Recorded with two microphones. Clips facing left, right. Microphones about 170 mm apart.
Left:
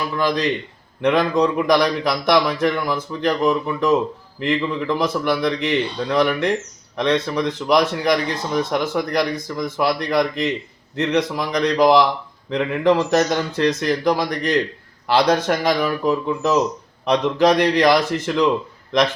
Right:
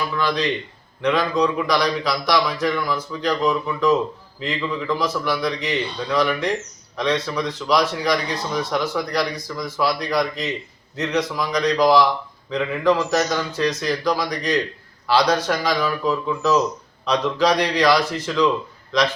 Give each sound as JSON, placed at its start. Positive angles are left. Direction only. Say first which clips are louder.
{"t": 0.2, "sound": "speech", "louder": "left 3 dB", "side_deg": 45}